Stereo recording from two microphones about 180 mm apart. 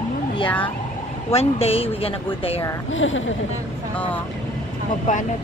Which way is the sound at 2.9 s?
90° left.